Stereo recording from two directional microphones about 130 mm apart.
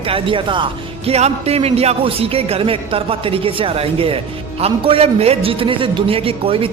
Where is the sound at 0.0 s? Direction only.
45° right (ahead or behind).